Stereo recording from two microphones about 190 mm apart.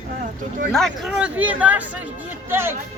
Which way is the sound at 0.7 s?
Centre (ahead or behind).